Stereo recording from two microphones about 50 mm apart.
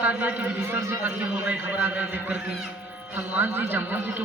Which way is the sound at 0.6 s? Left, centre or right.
Right.